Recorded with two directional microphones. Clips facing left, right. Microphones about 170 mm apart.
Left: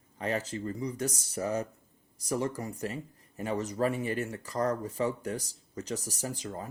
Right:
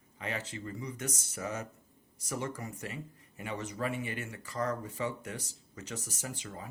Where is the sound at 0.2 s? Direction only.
40° left (ahead or behind).